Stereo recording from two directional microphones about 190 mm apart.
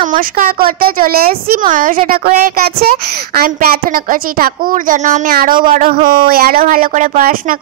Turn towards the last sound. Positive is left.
turn(degrees=-50)  # may be behind; listen again after turning